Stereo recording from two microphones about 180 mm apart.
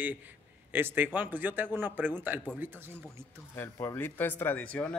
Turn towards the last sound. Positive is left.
turn(degrees=10)  # may be behind; listen again after turning